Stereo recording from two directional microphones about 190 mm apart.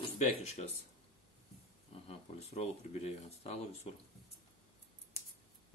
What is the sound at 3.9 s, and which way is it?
Speech, 35° left (ahead or behind).